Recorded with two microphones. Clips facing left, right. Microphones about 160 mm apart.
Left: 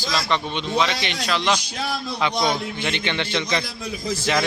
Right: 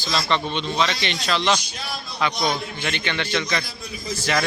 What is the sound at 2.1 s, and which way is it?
A man's voice, 20° left (ahead or behind).